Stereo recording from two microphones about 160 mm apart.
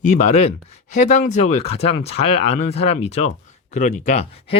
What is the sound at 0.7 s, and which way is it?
Speech, 45° left (ahead or behind).